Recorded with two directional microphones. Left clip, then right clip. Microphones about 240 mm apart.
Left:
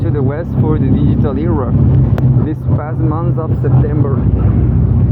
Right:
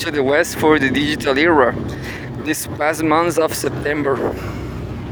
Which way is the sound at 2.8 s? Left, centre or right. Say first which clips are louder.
Right 8 dB; right.